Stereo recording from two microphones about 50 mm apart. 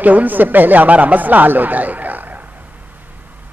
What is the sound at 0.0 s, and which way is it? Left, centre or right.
A man's voice, right.